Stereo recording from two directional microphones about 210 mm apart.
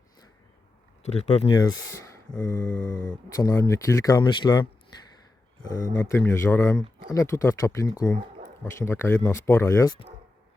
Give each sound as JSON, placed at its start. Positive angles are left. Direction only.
{"t": 1.0, "sound": "speech", "side_deg": 30}
{"t": 1.5, "sound": "speech", "side_deg": 20}
{"t": 5.7, "sound": "speech", "side_deg": 15}